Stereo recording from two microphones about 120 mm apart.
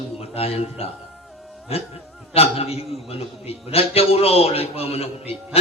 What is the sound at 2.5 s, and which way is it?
A man's voice, 55° left (ahead or behind).